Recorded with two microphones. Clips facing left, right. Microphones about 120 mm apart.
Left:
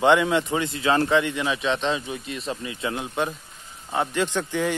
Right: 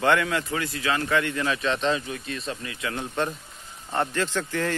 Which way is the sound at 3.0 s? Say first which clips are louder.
Left 1 dB; 10° left (ahead or behind).